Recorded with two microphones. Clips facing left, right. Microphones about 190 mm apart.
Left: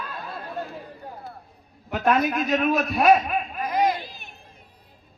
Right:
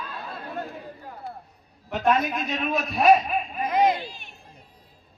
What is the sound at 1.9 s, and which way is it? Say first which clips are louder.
A man's voice: left 1 dB; 5° left (ahead or behind).